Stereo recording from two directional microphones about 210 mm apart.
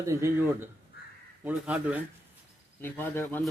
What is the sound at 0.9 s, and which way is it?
Crow, 50° left (ahead or behind).